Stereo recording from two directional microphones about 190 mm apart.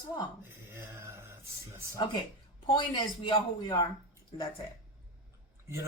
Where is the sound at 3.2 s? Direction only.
25° left (ahead or behind).